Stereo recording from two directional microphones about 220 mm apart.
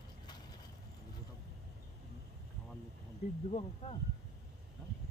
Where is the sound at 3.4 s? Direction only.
30° left (ahead or behind).